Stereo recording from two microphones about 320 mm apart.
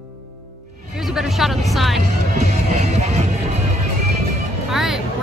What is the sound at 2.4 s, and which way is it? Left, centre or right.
Music, right.